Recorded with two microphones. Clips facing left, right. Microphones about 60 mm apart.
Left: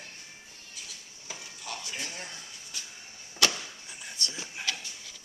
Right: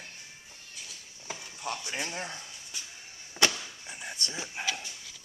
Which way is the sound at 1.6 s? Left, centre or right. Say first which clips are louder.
Right 4 dB; right.